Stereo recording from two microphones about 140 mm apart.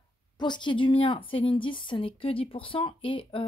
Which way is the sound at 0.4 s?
35° left (ahead or behind).